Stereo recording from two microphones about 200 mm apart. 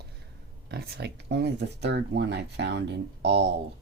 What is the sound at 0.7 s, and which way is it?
Speech, 55° right (ahead or behind).